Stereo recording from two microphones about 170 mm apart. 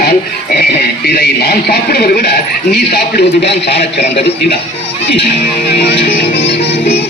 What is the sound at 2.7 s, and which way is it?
Speech, 75° left (ahead or behind).